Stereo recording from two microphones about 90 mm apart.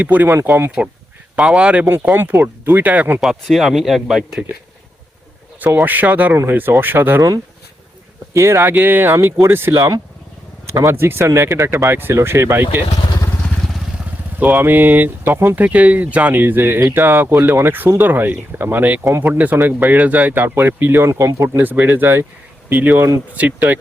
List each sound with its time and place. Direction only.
0.0 s speech: 20° right (ahead or behind)
1.4 s speech: 10° right (ahead or behind)
3.2 s speech: centre (ahead or behind)
5.5 s speech: 20° right (ahead or behind)
8.3 s speech: 30° right (ahead or behind)
9.7 s speech: 40° right (ahead or behind)
10.9 s speech: 25° right (ahead or behind)
14.3 s speech: 20° right (ahead or behind)
21.6 s speech: 20° right (ahead or behind)